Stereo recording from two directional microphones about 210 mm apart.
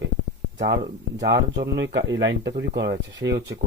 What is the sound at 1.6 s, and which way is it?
Speech, 55° right (ahead or behind).